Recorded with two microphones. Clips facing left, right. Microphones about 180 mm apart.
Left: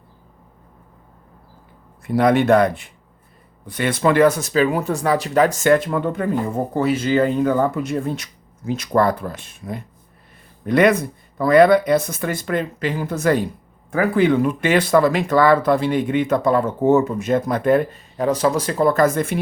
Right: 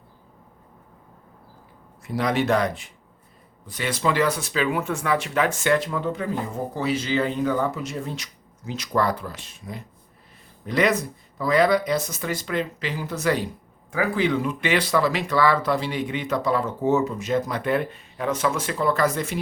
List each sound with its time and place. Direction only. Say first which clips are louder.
2.1 s speech: left 7 dB; 55° left (ahead or behind)